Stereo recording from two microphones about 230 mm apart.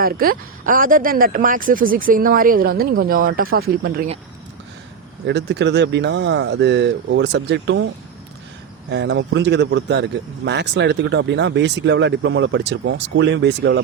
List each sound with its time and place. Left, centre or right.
0.0 s speech: right
5.2 s speech: right
8.9 s speech: right